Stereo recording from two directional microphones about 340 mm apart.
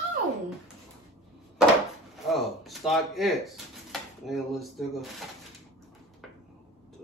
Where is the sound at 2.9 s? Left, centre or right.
Centre.